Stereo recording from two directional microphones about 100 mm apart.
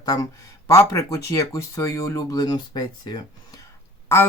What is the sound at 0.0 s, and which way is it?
Speech, 35° left (ahead or behind).